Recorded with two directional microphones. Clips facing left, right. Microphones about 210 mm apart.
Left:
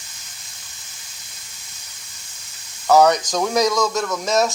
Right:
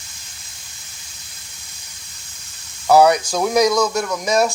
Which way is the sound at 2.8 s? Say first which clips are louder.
Right 2 dB; 10° right (ahead or behind).